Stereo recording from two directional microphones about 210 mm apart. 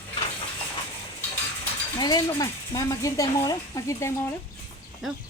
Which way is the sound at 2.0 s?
20° left (ahead or behind).